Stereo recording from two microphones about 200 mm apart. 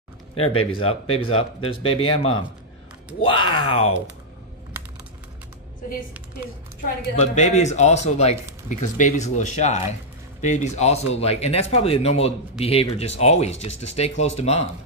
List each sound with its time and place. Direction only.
0.4 s speech: 25° left (ahead or behind)
4.7 s typing: 10° right (ahead or behind)
7.2 s speech: 35° left (ahead or behind)